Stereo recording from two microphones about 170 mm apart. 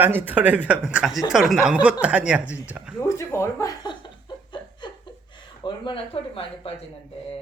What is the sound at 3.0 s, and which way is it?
Chuckle, 15° left (ahead or behind).